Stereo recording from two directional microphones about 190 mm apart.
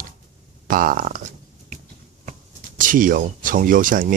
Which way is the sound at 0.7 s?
45° right (ahead or behind).